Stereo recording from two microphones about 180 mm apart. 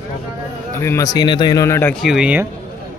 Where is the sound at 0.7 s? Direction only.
15° left (ahead or behind).